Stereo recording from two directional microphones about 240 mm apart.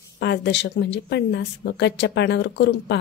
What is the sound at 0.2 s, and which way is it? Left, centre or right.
A woman's voice, left.